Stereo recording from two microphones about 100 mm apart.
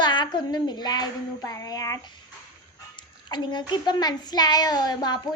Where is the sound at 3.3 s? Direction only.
50° left (ahead or behind).